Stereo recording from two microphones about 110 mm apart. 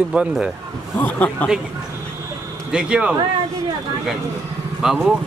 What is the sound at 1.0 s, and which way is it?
Speech, 15° left (ahead or behind).